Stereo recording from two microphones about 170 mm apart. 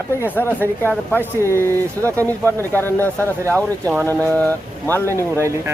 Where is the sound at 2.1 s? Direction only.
10° left (ahead or behind).